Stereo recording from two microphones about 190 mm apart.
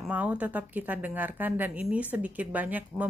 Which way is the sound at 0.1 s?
10° right (ahead or behind).